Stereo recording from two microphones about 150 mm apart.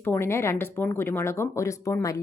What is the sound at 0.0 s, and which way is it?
A woman's voice, 15° left (ahead or behind).